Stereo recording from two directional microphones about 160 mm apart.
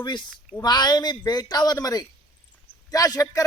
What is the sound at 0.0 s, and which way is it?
Speech, 30° left (ahead or behind).